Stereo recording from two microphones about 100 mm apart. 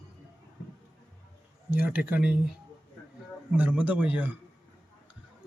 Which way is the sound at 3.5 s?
15° right (ahead or behind).